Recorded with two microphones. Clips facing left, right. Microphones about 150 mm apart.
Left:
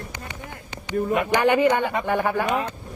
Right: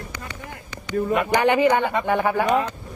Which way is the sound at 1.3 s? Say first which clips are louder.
Right 1 dB; 50° right (ahead or behind).